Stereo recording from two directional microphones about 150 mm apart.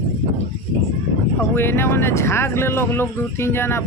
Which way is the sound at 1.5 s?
15° left (ahead or behind).